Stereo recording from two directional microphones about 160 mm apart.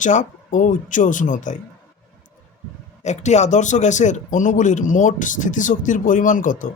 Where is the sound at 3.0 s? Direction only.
45° left (ahead or behind).